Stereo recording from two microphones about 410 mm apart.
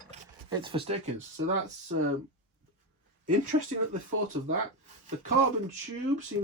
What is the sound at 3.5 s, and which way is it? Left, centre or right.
Speech, right.